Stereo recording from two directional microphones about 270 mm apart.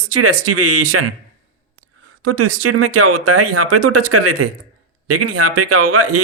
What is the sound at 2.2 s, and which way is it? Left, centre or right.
Speech, right.